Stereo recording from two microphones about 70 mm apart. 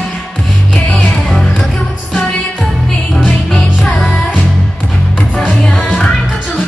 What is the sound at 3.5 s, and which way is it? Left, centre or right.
Music, centre.